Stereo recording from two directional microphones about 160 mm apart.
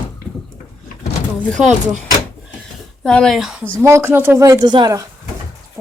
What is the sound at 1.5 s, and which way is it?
Speech, 5° left (ahead or behind).